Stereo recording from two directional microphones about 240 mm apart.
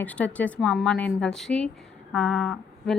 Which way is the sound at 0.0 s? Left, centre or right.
Centre.